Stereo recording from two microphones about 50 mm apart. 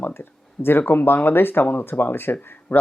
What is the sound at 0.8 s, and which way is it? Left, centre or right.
Speech, left.